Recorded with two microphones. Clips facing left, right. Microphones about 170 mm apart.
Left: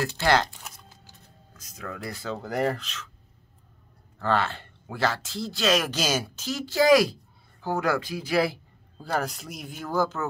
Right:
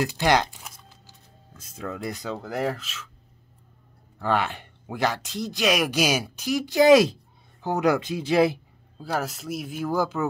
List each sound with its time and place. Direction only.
0.0 s speech: 15° right (ahead or behind)
1.6 s speech: 30° right (ahead or behind)
2.3 s speech: centre (ahead or behind)
4.2 s speech: 15° right (ahead or behind)
9.0 s speech: 5° right (ahead or behind)